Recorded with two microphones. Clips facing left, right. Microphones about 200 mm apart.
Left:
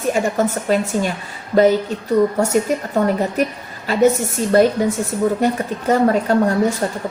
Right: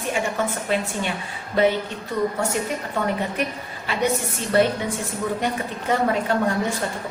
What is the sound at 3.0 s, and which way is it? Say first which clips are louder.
A woman's voice: left 6 dB; 40° left (ahead or behind).